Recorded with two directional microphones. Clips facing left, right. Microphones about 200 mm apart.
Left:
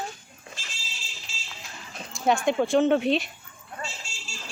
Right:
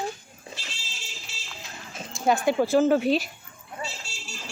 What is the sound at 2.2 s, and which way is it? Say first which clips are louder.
Speech: right 1 dB; 5° right (ahead or behind).